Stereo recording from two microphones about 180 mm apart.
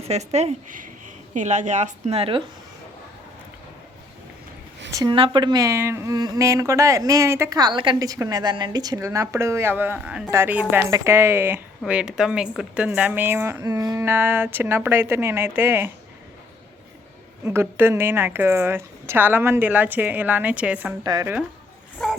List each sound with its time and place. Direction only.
0.1 s speech: 35° right (ahead or behind)
4.9 s speech: 20° right (ahead or behind)
17.4 s speech: 15° right (ahead or behind)
21.0 s speech: 20° right (ahead or behind)
21.9 s dog: 5° left (ahead or behind)